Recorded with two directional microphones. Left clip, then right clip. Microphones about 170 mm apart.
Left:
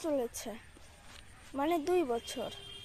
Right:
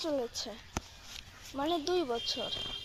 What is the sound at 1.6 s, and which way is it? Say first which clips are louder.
Speech: left 1 dB; 20° left (ahead or behind).